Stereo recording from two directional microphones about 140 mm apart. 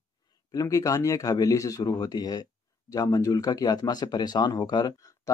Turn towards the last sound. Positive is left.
turn(degrees=30)  # may be behind; listen again after turning